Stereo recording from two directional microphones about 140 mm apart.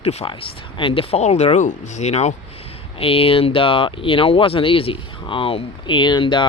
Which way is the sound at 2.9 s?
40° left (ahead or behind).